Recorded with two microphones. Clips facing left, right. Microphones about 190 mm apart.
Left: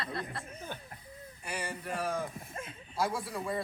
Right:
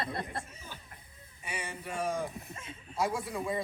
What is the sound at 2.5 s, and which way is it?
Speech, 55° left (ahead or behind).